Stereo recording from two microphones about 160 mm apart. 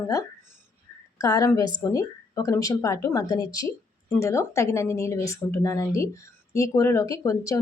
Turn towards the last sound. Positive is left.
turn(degrees=20)  # may be behind; listen again after turning